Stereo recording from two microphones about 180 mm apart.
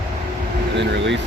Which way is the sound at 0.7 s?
85° right.